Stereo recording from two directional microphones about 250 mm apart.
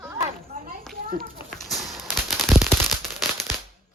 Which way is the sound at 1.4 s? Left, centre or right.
Centre.